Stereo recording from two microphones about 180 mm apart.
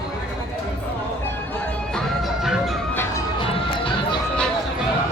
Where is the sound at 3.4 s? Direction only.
25° left (ahead or behind).